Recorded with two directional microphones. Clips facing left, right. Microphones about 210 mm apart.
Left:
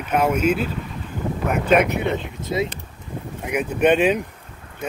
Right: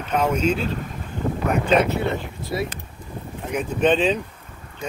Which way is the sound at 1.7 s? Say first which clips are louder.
Left 3 dB; 15° left (ahead or behind).